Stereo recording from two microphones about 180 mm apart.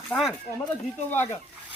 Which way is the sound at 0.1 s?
10° left (ahead or behind).